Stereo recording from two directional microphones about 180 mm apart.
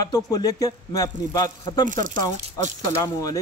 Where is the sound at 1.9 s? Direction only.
45° right (ahead or behind).